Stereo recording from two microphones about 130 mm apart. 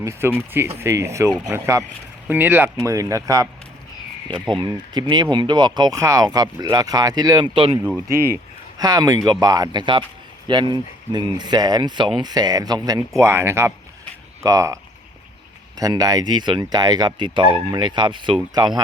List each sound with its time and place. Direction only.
0.0 s speech: 20° right (ahead or behind)
2.8 s speech: 25° right (ahead or behind)
4.6 s speech: 35° right (ahead or behind)
8.8 s speech: 30° right (ahead or behind)
15.8 s speech: 30° right (ahead or behind)